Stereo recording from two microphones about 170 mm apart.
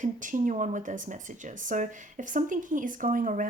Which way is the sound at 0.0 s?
50° right (ahead or behind).